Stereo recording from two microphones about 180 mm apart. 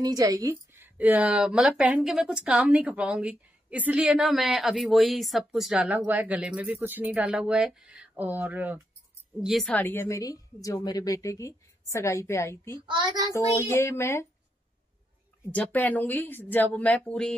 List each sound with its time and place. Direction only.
0.0 s a woman's voice: 20° right (ahead or behind)
0.9 s a woman's voice: 10° right (ahead or behind); by 12.7 s 15° left (ahead or behind)
12.7 s a child's voice: 25° right (ahead or behind)
13.6 s a woman's voice: 15° left (ahead or behind)
15.5 s a woman's voice: 10° left (ahead or behind)